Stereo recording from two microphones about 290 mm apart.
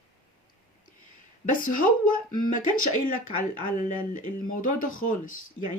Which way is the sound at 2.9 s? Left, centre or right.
Left.